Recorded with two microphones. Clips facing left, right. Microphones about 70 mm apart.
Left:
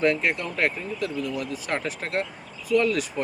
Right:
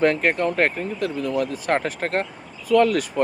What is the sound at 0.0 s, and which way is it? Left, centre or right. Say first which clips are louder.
Speech: right 4 dB; right.